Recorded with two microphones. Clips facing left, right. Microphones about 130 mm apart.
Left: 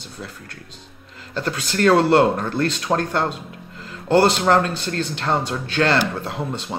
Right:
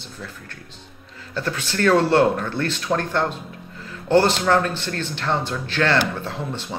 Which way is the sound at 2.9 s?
35° left (ahead or behind).